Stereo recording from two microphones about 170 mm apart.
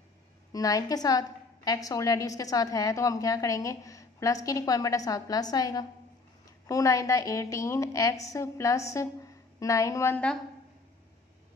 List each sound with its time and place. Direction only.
0.5 s a woman's voice: 20° left (ahead or behind)